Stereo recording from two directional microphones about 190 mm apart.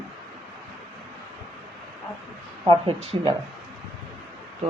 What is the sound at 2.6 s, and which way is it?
Speech, 30° right (ahead or behind).